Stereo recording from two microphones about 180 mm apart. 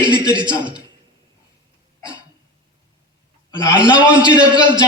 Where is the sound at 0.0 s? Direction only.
25° right (ahead or behind).